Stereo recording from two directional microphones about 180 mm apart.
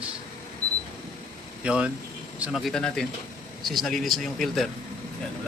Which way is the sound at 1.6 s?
5° right (ahead or behind).